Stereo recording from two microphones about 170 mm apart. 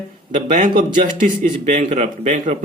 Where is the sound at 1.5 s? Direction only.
45° right (ahead or behind).